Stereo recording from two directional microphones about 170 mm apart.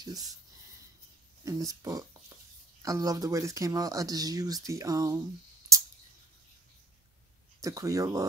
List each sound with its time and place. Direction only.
0.0 s speech: 20° right (ahead or behind)
1.4 s speech: 20° right (ahead or behind)
7.6 s speech: 20° right (ahead or behind)